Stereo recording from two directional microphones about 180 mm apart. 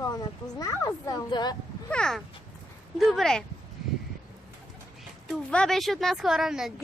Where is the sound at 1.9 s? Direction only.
5° left (ahead or behind).